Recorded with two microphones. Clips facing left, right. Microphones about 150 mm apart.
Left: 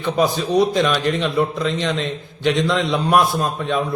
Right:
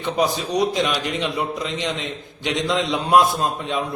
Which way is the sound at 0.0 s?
20° right (ahead or behind).